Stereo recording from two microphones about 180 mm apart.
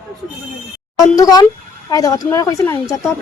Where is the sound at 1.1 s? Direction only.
20° left (ahead or behind).